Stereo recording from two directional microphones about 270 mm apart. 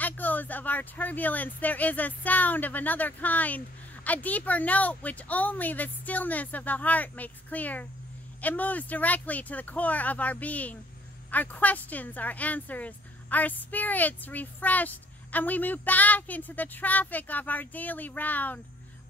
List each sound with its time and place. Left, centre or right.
0.0 s speech: centre